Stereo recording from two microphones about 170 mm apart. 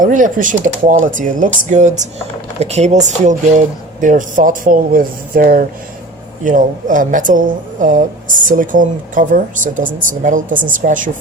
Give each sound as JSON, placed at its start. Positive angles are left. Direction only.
{"t": 0.0, "sound": "a woman's voice", "side_deg": -50}